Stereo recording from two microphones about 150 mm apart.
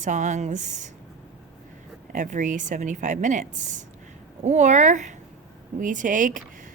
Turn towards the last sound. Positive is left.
turn(degrees=-60)  # may be behind; listen again after turning